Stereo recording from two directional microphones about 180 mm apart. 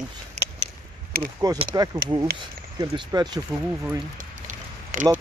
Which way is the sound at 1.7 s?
20° right (ahead or behind).